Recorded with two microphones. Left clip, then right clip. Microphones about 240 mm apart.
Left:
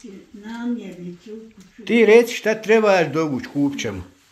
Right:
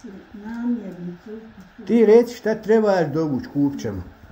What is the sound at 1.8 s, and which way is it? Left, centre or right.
A man's voice, centre.